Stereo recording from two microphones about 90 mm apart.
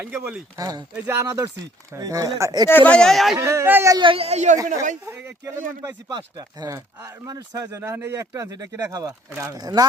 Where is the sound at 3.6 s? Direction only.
25° right (ahead or behind).